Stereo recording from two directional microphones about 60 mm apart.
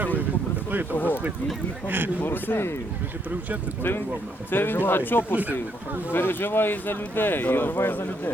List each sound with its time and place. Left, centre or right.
0.9 s speech: left
2.2 s speech: left
4.5 s speech: left
5.3 s speech: right
6.1 s speech: left